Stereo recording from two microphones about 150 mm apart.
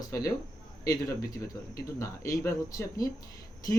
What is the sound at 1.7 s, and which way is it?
Speech, 20° left (ahead or behind).